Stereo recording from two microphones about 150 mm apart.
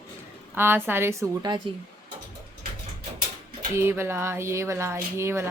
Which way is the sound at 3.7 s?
15° right (ahead or behind).